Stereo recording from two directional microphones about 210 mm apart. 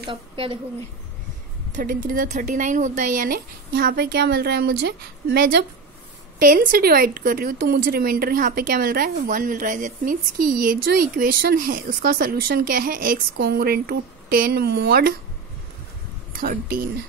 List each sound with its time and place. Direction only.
0.0 s a woman's voice: 25° right (ahead or behind)
1.7 s a woman's voice: 40° right (ahead or behind)
16.3 s a woman's voice: 40° right (ahead or behind)